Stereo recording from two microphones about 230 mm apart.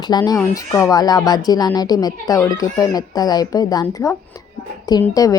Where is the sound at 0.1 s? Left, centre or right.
Centre.